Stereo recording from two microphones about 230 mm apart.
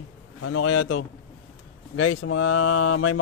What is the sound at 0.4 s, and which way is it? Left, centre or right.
Speech, left.